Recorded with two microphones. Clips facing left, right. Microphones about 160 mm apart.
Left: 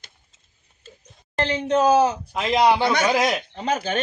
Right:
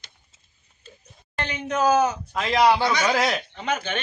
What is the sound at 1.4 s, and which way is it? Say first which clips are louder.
Speech: left 5 dB; 30° left (ahead or behind).